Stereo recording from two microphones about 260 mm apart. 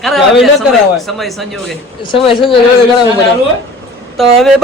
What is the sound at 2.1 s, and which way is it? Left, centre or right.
Speech, centre.